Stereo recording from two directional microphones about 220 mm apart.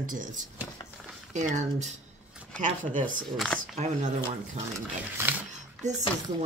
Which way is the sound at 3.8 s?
35° right (ahead or behind).